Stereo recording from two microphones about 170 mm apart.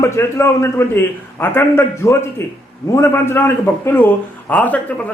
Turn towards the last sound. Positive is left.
turn(degrees=10)  # may be behind; listen again after turning